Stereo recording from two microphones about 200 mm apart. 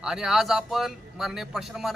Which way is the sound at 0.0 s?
Centre (ahead or behind).